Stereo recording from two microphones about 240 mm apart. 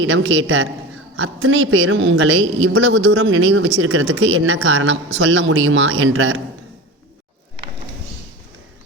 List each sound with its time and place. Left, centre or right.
0.0 s a woman's voice: right